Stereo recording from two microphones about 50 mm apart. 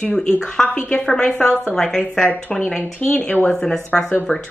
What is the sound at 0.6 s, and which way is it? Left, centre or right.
A woman's voice, left.